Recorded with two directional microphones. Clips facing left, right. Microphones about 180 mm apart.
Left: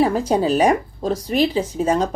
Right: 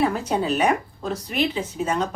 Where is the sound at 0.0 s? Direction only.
30° left (ahead or behind).